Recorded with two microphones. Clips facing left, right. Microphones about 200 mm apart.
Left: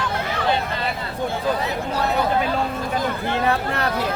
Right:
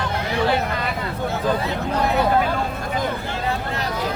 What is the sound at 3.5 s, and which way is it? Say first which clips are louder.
Vehicle: left 1 dB; 60° left (ahead or behind).